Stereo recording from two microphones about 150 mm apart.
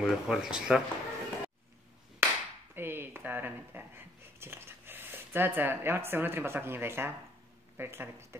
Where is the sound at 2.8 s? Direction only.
15° right (ahead or behind).